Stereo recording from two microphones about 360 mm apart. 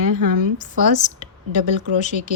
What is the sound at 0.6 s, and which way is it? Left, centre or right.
Speech, centre.